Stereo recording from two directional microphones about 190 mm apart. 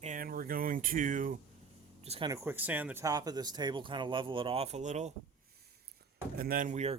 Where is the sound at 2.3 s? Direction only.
15° right (ahead or behind); by 5.1 s 40° right (ahead or behind).